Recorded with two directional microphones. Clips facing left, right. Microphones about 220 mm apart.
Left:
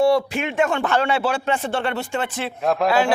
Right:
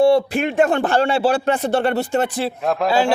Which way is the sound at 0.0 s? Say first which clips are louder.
Right 3 dB; 30° right (ahead or behind).